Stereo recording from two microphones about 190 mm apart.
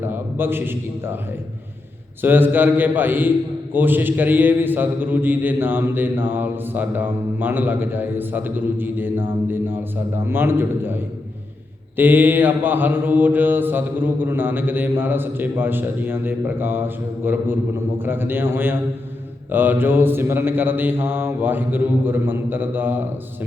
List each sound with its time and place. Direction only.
0.0 s a man's voice: 10° right (ahead or behind)
2.2 s a man's voice: 10° right (ahead or behind)
10.2 s a man's voice: 10° right (ahead or behind)